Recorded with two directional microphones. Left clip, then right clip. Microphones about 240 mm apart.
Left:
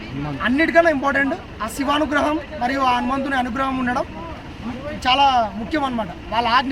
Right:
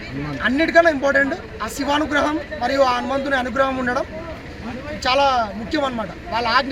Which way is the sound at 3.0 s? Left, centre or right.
Centre.